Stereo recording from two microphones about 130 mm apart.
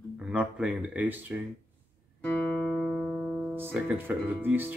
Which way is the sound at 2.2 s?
15° left (ahead or behind).